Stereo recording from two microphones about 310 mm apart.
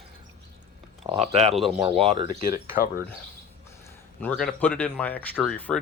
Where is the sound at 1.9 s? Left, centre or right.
Centre.